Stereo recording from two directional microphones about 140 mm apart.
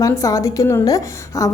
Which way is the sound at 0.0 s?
25° left (ahead or behind).